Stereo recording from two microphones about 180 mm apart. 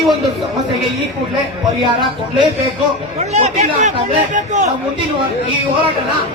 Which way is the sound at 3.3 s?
40° right (ahead or behind).